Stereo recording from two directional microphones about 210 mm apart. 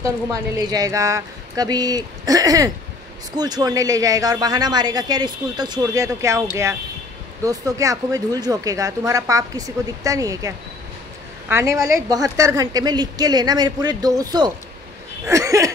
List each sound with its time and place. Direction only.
0.0 s a woman's voice: 15° right (ahead or behind)